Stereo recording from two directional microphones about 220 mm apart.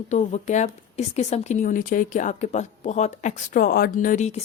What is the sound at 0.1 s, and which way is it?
Speech, 30° left (ahead or behind).